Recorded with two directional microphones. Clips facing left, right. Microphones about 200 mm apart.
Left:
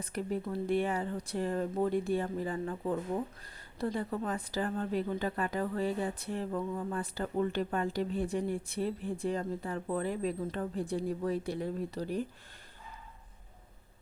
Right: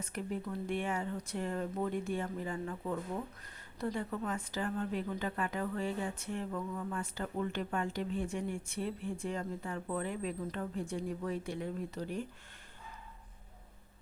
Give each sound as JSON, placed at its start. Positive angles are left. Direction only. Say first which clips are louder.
{"t": 0.0, "sound": "a woman's voice", "louder": "left 4 dB", "side_deg": 35}